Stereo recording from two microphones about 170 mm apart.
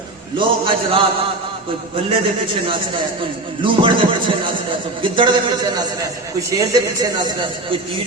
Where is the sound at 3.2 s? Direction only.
30° right (ahead or behind).